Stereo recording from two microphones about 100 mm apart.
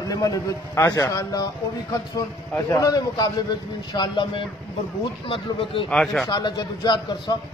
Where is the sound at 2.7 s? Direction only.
35° left (ahead or behind); by 4.4 s 50° left (ahead or behind).